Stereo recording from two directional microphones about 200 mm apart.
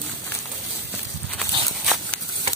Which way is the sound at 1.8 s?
Centre (ahead or behind).